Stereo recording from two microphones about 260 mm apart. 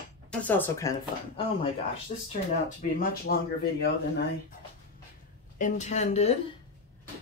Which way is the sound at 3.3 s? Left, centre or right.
Left.